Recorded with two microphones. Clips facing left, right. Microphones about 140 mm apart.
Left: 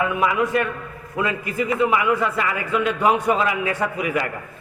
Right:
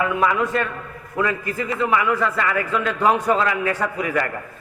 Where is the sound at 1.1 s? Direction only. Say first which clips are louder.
Right 1 dB; 20° left (ahead or behind).